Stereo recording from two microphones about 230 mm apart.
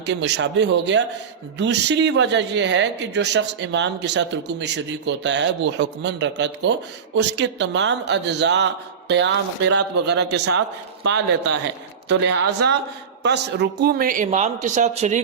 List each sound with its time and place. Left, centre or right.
0.0 s speech: right